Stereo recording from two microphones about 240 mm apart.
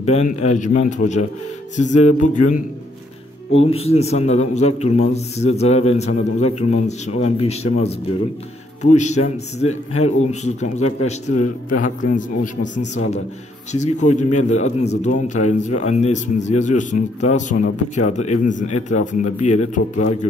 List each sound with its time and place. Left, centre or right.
0.0 s a man's voice: left
3.7 s a man's voice: left